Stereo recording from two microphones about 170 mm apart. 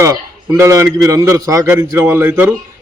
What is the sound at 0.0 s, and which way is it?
A man's voice, 15° right (ahead or behind).